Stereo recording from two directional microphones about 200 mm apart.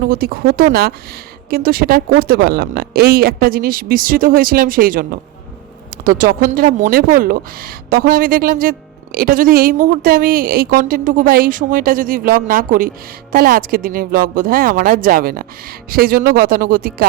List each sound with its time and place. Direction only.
0.0 s a woman's voice: 45° right (ahead or behind)
6.1 s a woman's voice: 45° right (ahead or behind)